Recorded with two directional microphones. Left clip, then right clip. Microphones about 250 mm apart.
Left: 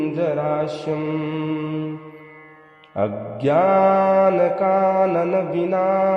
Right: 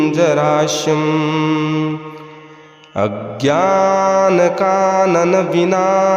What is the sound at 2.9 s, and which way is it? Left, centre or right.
Mantra, right.